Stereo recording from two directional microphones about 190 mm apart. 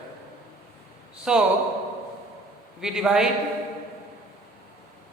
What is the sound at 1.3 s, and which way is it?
Speech, 5° right (ahead or behind).